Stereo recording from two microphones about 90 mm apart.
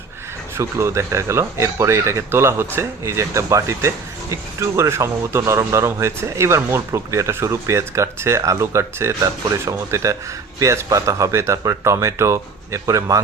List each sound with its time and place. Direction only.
0.5 s speech: 30° right (ahead or behind)